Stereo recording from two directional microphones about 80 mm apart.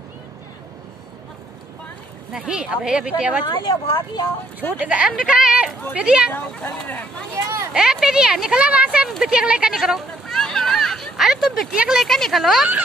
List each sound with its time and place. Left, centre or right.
2.3 s speech: centre
3.5 s a woman's voice: left
4.7 s speech: centre
6.3 s speech: left
7.3 s speech: right
7.7 s speech: centre
9.2 s a sound: centre
11.7 s speech: centre
12.0 s speech: centre